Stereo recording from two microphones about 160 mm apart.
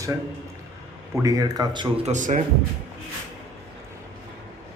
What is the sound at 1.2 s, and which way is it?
Speech, 25° right (ahead or behind).